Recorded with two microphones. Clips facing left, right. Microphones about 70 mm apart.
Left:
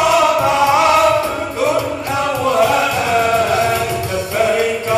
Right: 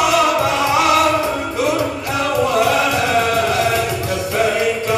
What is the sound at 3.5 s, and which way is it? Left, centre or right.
Music, left.